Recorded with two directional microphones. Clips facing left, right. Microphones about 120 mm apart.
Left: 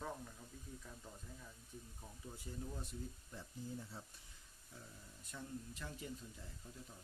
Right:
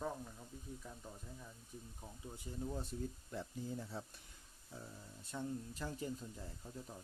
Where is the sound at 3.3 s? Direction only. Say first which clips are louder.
Right 3 dB; 90° right.